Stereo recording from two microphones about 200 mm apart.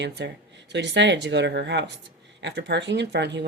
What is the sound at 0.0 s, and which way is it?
Speech, 60° right (ahead or behind).